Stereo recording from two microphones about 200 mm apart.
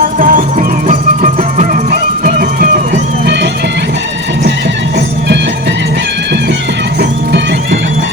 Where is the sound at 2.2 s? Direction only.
45° right (ahead or behind).